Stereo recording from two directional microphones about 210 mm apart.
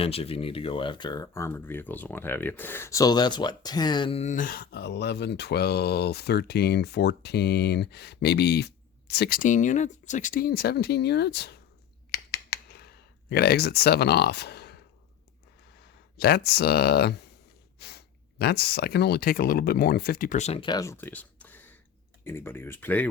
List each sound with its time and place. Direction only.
0.0 s speech: 30° left (ahead or behind); by 11.5 s 50° left (ahead or behind)
12.3 s a sound: 50° left (ahead or behind)
13.3 s speech: 50° left (ahead or behind)
15.8 s speech: 50° left (ahead or behind); by 23.0 s 10° left (ahead or behind)